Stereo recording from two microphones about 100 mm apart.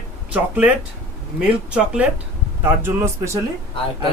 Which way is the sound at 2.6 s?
25° right (ahead or behind).